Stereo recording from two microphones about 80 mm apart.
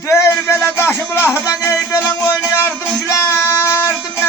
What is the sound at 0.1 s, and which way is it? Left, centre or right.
Music, left.